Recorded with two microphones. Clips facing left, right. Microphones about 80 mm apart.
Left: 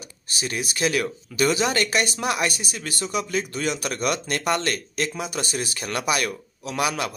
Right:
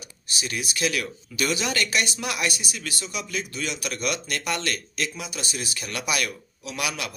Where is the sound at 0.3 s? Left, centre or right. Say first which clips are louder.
Left 2 dB; left.